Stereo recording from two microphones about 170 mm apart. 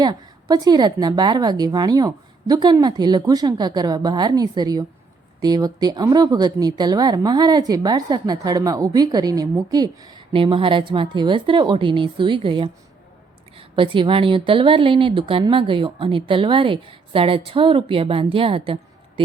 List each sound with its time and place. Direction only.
0.0 s a woman's voice: 25° right (ahead or behind)